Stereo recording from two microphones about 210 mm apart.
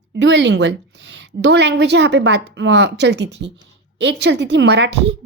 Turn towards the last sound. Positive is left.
turn(degrees=-55)  # may be behind; listen again after turning